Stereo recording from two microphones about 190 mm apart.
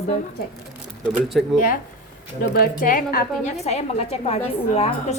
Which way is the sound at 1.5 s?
45° left (ahead or behind).